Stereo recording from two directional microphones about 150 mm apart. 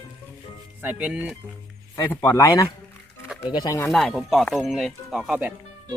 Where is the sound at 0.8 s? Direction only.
10° right (ahead or behind).